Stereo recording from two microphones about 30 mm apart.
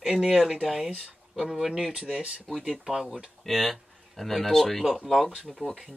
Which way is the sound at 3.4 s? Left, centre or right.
Centre.